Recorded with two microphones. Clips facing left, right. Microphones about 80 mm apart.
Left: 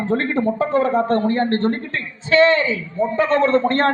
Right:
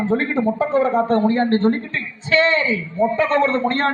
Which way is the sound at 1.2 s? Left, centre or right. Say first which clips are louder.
Right 2 dB; left.